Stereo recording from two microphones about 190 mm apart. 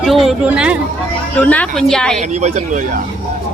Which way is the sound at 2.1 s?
40° right (ahead or behind).